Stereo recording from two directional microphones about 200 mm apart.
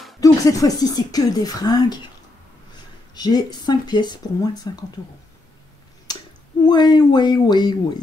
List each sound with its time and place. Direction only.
0.2 s speech: 15° left (ahead or behind)
6.1 s a sound: 20° left (ahead or behind)
6.6 s speech: 20° left (ahead or behind)